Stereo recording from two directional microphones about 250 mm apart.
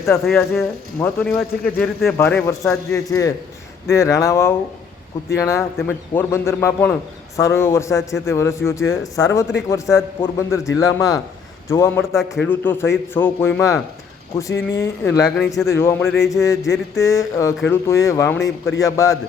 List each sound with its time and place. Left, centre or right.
0.0 s speech: centre
14.5 s speech: left
15.0 s speech: centre